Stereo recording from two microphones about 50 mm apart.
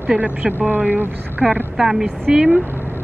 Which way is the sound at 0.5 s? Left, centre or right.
Right.